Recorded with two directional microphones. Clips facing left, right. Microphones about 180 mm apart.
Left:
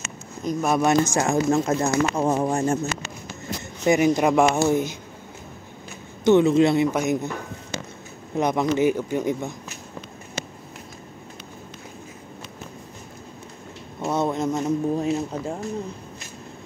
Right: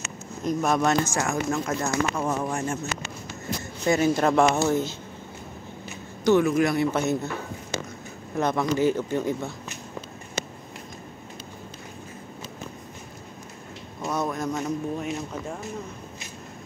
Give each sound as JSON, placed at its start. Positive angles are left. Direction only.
{"t": 0.5, "sound": "speech", "side_deg": 5}
{"t": 3.8, "sound": "speech", "side_deg": 15}
{"t": 6.2, "sound": "speech", "side_deg": 25}
{"t": 6.9, "sound": "speech", "side_deg": 15}
{"t": 8.4, "sound": "speech", "side_deg": 20}
{"t": 14.0, "sound": "speech", "side_deg": 25}